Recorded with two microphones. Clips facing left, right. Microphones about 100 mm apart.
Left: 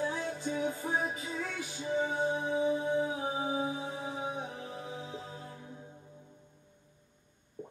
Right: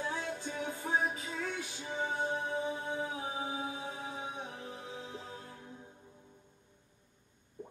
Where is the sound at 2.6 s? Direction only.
20° left (ahead or behind).